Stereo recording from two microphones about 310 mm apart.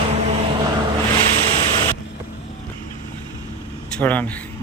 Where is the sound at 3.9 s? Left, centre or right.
Centre.